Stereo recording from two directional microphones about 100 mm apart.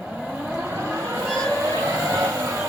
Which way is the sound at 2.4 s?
30° right (ahead or behind).